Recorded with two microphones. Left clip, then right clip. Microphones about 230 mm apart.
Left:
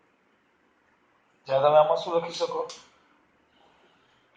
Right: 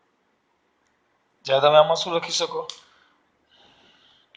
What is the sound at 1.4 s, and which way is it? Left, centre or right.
Speech, right.